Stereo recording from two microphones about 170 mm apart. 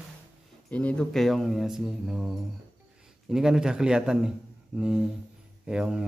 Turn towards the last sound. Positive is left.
turn(degrees=-5)  # may be behind; listen again after turning